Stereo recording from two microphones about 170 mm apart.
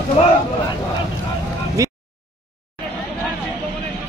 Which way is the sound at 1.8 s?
20° right (ahead or behind).